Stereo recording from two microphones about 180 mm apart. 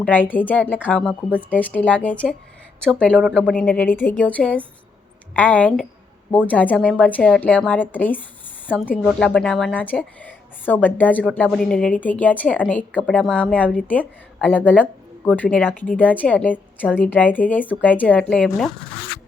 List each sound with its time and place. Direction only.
0.0 s a woman's voice: 10° left (ahead or behind)